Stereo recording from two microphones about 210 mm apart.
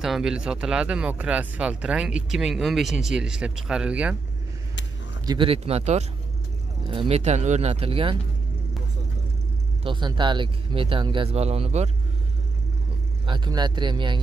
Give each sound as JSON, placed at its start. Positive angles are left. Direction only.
{"t": 0.0, "sound": "speech", "side_deg": 0}
{"t": 5.2, "sound": "speech", "side_deg": -20}
{"t": 9.8, "sound": "speech", "side_deg": -20}
{"t": 13.2, "sound": "speech", "side_deg": -20}